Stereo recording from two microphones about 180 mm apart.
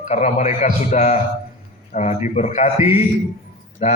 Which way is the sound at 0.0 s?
40° left (ahead or behind).